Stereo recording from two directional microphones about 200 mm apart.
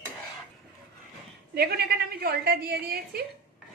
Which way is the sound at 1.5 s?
50° right (ahead or behind).